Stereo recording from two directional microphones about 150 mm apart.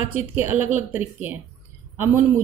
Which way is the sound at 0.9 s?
10° right (ahead or behind).